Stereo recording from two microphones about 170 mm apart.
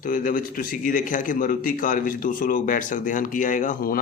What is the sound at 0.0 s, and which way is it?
A man's voice, 55° left (ahead or behind).